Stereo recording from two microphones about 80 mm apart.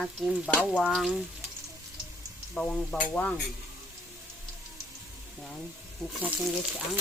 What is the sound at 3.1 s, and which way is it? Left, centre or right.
Stir, centre.